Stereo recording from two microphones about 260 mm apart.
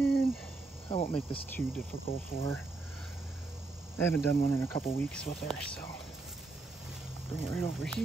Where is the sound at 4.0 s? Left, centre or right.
Centre.